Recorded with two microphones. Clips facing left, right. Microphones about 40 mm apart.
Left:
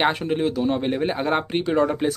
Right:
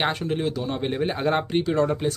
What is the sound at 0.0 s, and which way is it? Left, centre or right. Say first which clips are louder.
Speech: left 3 dB; centre.